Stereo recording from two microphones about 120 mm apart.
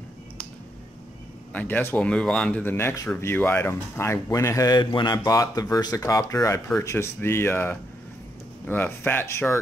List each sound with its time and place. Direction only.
1.5 s speech: 15° left (ahead or behind)
2.6 s speech: 20° left (ahead or behind)